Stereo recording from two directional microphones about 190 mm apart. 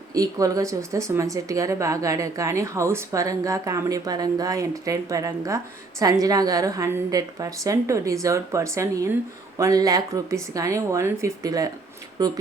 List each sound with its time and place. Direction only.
0.1 s a woman's voice: 20° right (ahead or behind)